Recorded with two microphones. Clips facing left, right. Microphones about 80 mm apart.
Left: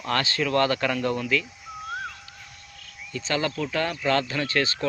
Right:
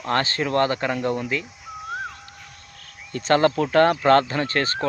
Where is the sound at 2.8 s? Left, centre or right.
Right.